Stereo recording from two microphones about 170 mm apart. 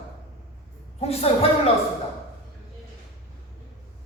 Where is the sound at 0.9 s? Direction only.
35° left (ahead or behind).